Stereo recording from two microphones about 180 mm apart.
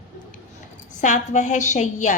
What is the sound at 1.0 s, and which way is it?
A woman's voice, 45° left (ahead or behind).